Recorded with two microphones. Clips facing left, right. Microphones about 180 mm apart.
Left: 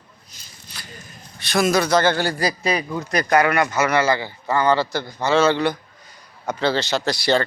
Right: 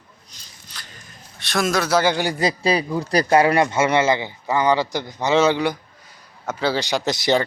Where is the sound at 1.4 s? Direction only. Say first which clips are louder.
Left 3 dB; centre (ahead or behind).